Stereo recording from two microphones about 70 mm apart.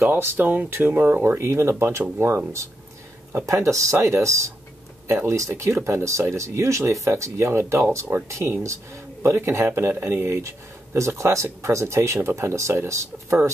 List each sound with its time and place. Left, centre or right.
0.0 s speech: right